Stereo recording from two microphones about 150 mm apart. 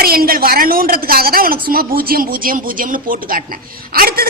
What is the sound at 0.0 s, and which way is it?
A woman's voice, 80° right.